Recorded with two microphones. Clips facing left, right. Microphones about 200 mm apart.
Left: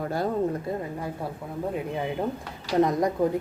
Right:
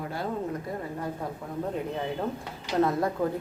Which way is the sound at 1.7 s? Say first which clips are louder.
Left 2 dB; 10° left (ahead or behind).